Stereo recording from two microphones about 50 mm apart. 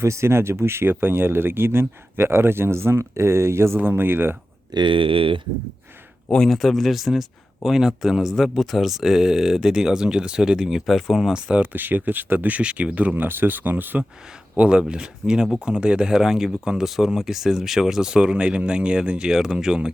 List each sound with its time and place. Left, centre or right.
0.0 s speech: right
3.8 s speech: right
6.5 s speech: centre
11.7 s speech: right
13.2 s speech: right
14.5 s speech: right